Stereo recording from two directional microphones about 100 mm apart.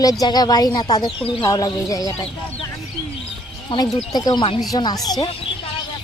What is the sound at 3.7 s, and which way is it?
Speech, 45° left (ahead or behind).